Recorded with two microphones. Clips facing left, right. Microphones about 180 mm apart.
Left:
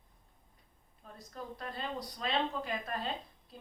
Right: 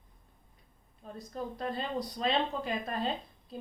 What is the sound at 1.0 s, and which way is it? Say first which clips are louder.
Speech: right 6 dB; 25° right (ahead or behind).